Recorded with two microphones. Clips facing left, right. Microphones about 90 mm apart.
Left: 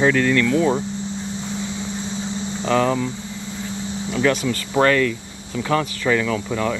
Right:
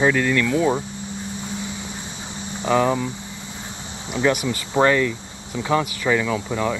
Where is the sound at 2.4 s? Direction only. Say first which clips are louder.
Even; 15° right (ahead or behind).